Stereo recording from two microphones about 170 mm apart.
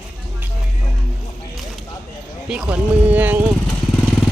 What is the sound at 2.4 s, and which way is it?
Speech, 5° right (ahead or behind).